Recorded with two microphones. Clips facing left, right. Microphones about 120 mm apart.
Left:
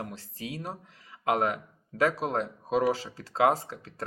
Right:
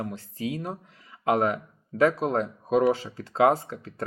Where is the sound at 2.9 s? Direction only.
40° left (ahead or behind).